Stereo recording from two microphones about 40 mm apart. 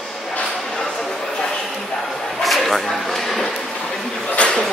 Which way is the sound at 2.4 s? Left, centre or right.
Centre.